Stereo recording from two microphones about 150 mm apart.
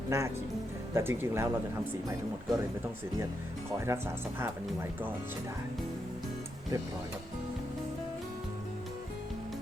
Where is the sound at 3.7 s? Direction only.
15° right (ahead or behind).